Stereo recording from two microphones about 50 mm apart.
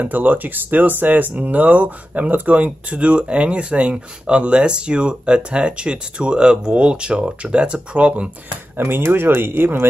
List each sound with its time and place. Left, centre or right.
0.0 s speech: right
8.7 s speech: right